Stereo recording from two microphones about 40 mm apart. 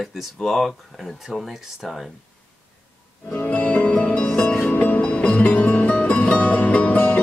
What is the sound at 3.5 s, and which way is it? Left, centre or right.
Music, left.